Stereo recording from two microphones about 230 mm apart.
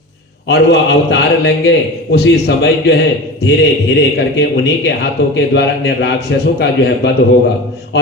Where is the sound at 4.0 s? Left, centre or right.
Left.